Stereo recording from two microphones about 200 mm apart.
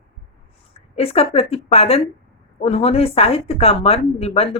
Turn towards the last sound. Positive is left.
turn(degrees=30)  # may be behind; listen again after turning